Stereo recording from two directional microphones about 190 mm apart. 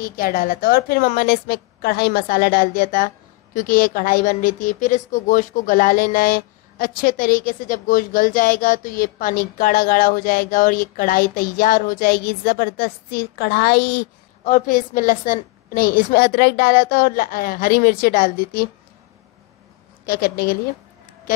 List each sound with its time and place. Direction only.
0.0 s a woman's voice: 50° left (ahead or behind)
14.4 s a woman's voice: 45° left (ahead or behind)
20.1 s a woman's voice: 50° left (ahead or behind)